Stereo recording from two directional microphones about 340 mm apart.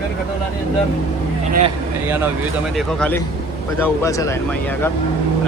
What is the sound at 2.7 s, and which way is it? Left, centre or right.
Speech, centre.